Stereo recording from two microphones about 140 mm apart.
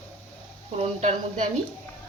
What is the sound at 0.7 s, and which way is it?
Speech, 45° right (ahead or behind).